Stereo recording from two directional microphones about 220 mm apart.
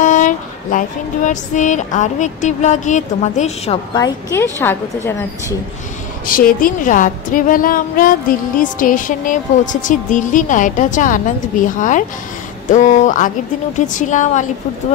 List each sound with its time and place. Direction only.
0.0 s female singing: 35° left (ahead or behind)
3.9 s a woman's voice: 15° left (ahead or behind)
6.2 s female singing: 40° left (ahead or behind)
12.6 s female singing: 35° left (ahead or behind)